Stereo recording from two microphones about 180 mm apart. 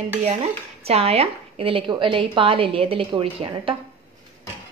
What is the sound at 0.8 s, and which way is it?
A woman's voice, 35° right (ahead or behind).